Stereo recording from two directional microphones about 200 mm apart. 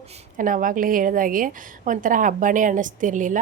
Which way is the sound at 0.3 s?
40° right (ahead or behind).